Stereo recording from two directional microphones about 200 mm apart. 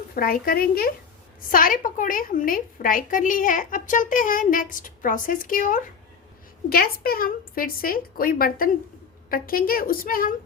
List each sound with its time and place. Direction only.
0.1 s a woman's voice: 50° left (ahead or behind)